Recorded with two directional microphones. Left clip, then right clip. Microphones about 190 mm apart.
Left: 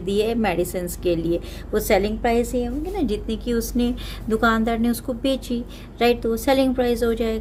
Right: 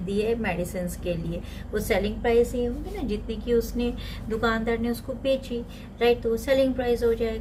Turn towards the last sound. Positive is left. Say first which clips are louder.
# left 2 dB
turn(degrees=60)  # may be behind; listen again after turning